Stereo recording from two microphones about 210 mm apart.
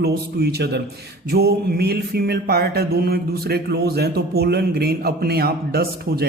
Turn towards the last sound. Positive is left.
turn(degrees=-50)  # may be behind; listen again after turning